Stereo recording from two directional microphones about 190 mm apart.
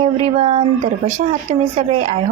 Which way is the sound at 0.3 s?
35° right (ahead or behind).